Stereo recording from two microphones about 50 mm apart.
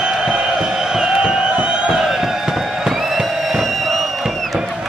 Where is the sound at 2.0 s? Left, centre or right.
Centre.